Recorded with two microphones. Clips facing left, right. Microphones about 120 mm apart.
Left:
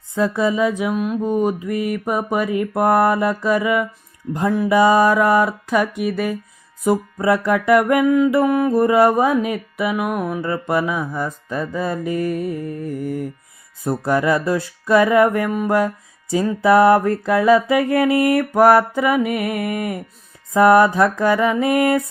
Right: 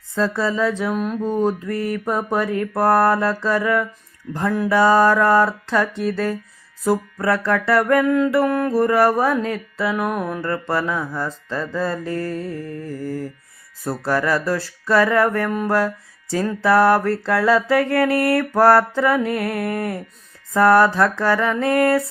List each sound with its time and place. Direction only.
0.1 s mantra: 15° left (ahead or behind)